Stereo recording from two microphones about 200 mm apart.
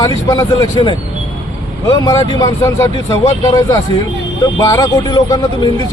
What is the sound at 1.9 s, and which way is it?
A man's voice, 20° left (ahead or behind).